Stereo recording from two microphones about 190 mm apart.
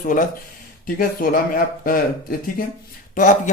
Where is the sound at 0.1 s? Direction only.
45° left (ahead or behind).